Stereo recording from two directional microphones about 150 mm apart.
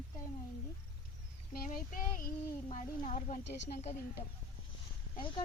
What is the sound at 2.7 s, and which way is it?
A woman's voice, 50° left (ahead or behind).